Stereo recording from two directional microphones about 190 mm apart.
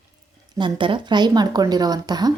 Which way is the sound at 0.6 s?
25° right (ahead or behind).